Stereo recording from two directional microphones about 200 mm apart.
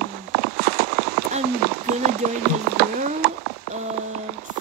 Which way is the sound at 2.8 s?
50° right (ahead or behind).